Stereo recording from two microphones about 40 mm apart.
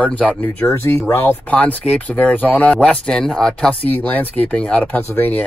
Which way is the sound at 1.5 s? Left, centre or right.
Left.